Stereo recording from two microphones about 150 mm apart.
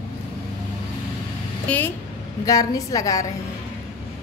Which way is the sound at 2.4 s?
25° left (ahead or behind).